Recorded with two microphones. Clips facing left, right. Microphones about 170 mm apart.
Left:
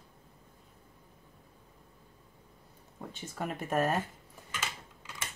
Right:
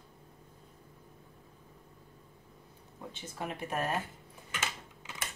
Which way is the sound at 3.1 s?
45° left (ahead or behind).